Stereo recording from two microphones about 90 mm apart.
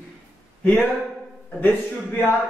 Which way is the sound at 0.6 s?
15° left (ahead or behind).